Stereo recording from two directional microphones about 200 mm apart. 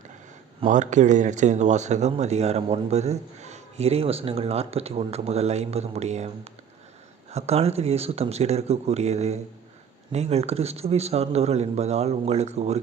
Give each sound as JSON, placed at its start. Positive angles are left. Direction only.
{"t": 0.7, "sound": "speech", "side_deg": -35}